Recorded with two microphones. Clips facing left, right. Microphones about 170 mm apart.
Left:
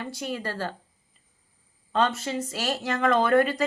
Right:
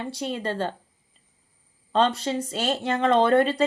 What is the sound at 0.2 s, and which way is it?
Speech, 25° right (ahead or behind).